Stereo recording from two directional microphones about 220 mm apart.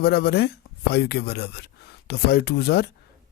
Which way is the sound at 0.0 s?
45° left (ahead or behind).